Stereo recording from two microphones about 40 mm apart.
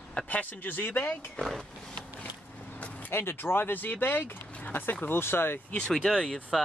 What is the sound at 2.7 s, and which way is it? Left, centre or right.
Vehicle, left.